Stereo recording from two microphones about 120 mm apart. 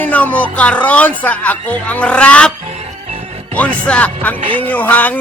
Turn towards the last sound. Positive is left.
turn(degrees=15)  # may be behind; listen again after turning